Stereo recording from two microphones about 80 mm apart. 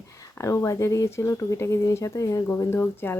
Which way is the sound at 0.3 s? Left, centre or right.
Left.